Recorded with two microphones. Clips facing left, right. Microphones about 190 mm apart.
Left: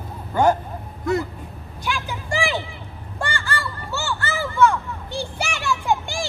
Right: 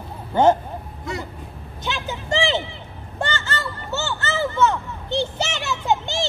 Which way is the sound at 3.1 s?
20° right (ahead or behind).